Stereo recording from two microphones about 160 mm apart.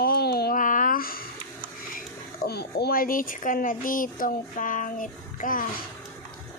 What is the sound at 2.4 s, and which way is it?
Speech, 90° left.